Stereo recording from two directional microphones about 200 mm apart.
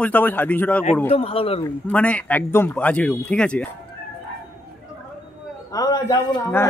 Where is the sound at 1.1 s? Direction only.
30° left (ahead or behind).